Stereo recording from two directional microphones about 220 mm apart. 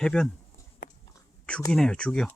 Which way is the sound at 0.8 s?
35° left (ahead or behind).